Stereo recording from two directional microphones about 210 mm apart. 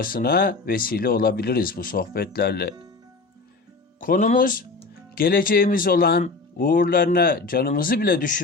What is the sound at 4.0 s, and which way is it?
Speech, 40° left (ahead or behind).